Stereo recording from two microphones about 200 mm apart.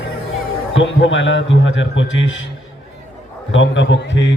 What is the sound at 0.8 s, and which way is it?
A man's voice, 70° left (ahead or behind).